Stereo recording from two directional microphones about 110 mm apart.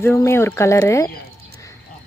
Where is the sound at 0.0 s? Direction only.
25° left (ahead or behind).